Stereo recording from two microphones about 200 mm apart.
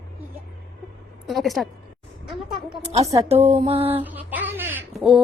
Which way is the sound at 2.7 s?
20° right (ahead or behind).